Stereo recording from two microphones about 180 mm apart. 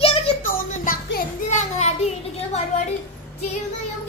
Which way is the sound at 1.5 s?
40° left (ahead or behind).